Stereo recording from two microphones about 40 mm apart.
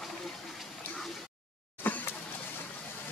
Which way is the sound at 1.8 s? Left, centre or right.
Left.